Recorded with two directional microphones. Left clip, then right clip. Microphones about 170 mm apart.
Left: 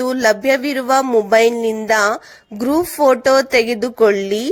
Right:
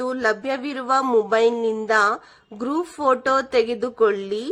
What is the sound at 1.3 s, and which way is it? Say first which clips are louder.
A woman's voice: left 6 dB; 20° left (ahead or behind).